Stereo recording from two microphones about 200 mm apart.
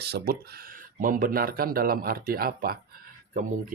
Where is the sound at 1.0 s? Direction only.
45° right (ahead or behind).